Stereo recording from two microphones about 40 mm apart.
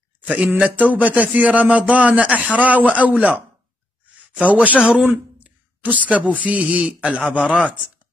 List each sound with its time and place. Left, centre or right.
0.2 s a sound: right
0.6 s speech: right
4.5 s speech: right